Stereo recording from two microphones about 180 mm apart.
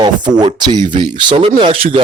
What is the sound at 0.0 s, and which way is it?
Speech, 25° right (ahead or behind).